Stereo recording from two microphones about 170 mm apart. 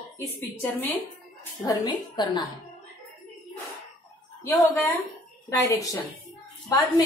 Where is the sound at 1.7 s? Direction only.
25° left (ahead or behind).